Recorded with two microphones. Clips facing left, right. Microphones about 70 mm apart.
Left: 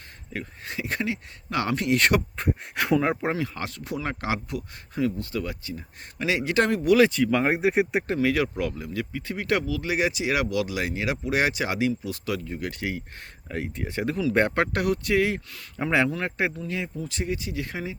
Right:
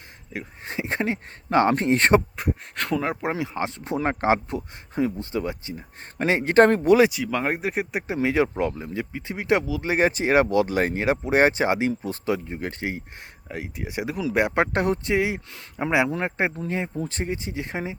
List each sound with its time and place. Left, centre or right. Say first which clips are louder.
0.6 s speech: right 3 dB; right
2.7 s speech: left 4 dB; centre
3.3 s speech: right 3 dB; right
6.1 s speech: right 6 dB; right
7.1 s speech: left 3 dB; centre
8.2 s speech: right 5 dB; right
9.9 s speech: right 6 dB; right
13.5 s speech: left 1 dB; centre
14.6 s speech: right 2 dB; right
16.1 s speech: right 2 dB; right